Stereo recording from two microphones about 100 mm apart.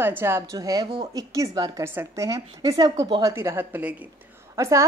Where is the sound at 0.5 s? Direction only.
35° right (ahead or behind).